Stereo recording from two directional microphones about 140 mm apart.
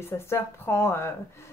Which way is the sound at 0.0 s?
20° left (ahead or behind).